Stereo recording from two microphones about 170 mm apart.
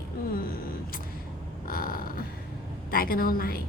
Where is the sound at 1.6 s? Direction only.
60° left (ahead or behind).